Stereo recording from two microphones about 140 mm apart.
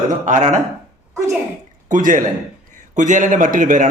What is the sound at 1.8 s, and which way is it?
A man's voice, 70° right (ahead or behind).